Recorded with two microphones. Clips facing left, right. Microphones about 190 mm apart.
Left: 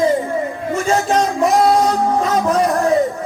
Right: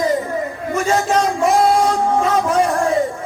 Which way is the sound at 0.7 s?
35° left (ahead or behind).